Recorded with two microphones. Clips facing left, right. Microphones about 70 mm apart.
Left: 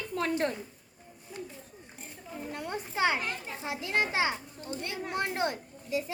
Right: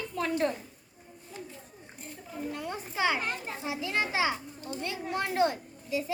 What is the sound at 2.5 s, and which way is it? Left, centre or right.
Speech, left.